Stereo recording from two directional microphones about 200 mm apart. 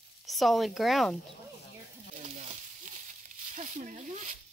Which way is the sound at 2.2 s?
35° right (ahead or behind).